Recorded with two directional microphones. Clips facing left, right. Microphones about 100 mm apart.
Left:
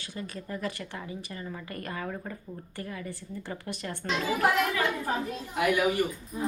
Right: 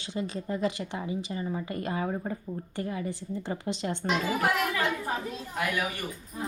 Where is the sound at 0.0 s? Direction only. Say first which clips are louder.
Right 5 dB; 20° right (ahead or behind).